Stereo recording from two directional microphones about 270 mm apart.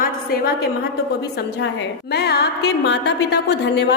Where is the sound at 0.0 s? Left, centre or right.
Left.